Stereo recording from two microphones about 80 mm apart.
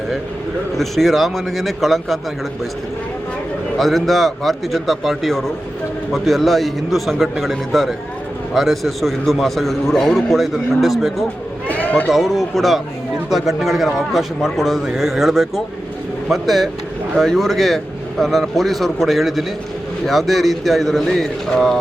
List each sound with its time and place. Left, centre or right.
0.8 s a man's voice: centre
3.8 s a man's voice: centre
11.7 s a sound: centre
12.0 s a man's voice: centre